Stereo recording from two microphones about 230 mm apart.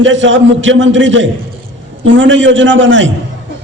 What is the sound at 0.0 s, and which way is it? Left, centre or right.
A man's voice, right.